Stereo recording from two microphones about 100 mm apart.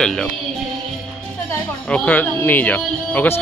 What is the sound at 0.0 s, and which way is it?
Speech, 5° left (ahead or behind).